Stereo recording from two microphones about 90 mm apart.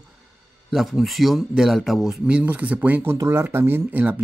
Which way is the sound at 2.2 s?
15° right (ahead or behind).